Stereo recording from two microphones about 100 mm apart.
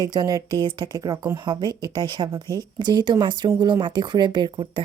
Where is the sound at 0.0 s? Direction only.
40° right (ahead or behind).